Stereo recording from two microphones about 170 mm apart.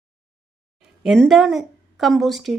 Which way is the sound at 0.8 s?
Centre (ahead or behind).